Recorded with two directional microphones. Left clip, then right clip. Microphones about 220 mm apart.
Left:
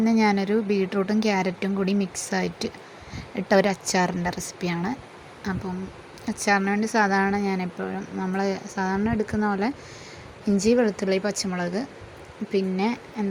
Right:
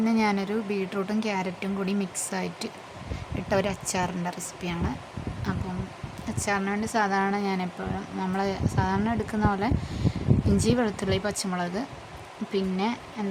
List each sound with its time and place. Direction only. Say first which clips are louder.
0.0 s speech: left 4 dB; 15° left (ahead or behind)